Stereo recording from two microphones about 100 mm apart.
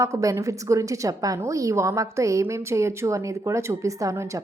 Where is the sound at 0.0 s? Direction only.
35° right (ahead or behind).